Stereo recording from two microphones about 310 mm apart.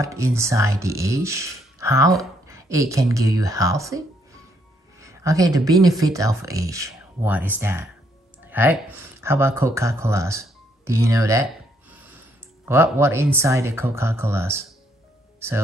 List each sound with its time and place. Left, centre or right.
0.0 s speech: centre
11.9 s snort: centre
12.6 s speech: centre